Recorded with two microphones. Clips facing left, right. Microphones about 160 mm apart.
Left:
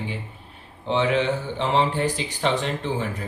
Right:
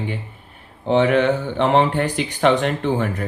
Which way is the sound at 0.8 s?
50° right (ahead or behind).